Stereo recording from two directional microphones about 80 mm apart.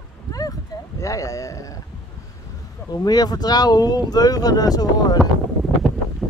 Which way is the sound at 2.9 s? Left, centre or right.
Left.